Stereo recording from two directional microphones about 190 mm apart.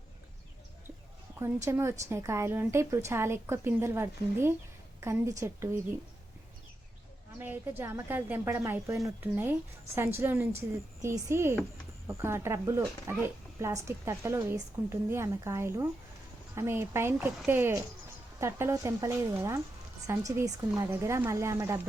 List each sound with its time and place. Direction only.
1.6 s speech: 15° right (ahead or behind)
7.3 s speech: 10° right (ahead or behind)